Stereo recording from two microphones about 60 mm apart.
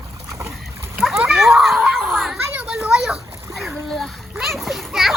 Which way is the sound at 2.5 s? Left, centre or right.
Right.